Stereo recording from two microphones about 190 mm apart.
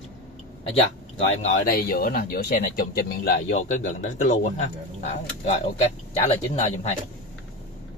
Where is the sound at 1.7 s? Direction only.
50° left (ahead or behind).